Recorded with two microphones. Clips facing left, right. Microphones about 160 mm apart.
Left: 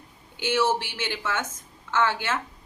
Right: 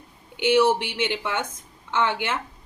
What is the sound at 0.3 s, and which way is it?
Speech, 15° right (ahead or behind).